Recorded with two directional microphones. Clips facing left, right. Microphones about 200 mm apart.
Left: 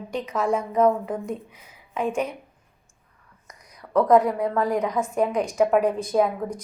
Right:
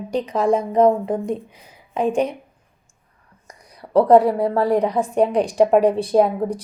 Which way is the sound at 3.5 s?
30° right (ahead or behind).